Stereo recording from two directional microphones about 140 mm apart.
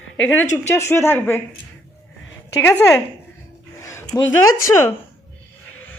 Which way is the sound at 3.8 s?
20° left (ahead or behind).